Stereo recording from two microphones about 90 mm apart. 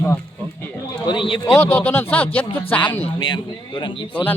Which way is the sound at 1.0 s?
65° left (ahead or behind).